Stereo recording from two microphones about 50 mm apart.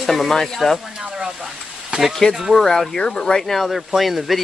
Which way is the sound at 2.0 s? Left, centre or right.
Centre.